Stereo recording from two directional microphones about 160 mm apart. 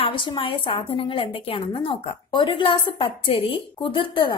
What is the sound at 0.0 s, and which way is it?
A woman's voice, 30° left (ahead or behind).